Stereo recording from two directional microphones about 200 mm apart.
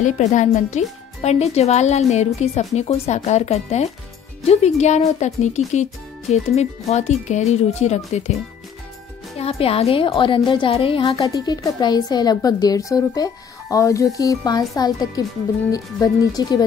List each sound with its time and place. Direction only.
0.0 s speech: 35° left (ahead or behind)
9.4 s a woman's voice: 30° left (ahead or behind)